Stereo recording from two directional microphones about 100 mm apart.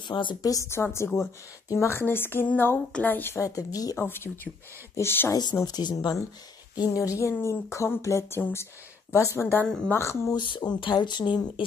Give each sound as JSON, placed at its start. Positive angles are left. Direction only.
{"t": 0.1, "sound": "speech", "side_deg": 50}
{"t": 3.3, "sound": "speech", "side_deg": 35}
{"t": 4.0, "sound": "speech", "side_deg": 20}
{"t": 5.3, "sound": "speech", "side_deg": 45}
{"t": 7.2, "sound": "speech", "side_deg": 30}
{"t": 10.3, "sound": "speech", "side_deg": 45}